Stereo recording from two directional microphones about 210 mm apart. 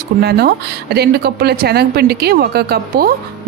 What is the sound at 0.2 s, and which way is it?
Speech, 50° right (ahead or behind).